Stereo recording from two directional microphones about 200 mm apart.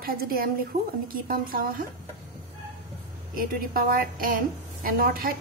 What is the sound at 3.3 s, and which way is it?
A woman's voice, 45° right (ahead or behind).